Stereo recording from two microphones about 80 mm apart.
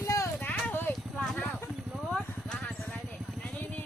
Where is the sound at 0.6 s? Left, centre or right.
Left.